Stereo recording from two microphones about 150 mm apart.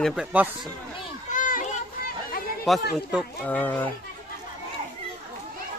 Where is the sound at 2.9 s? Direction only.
5° right (ahead or behind).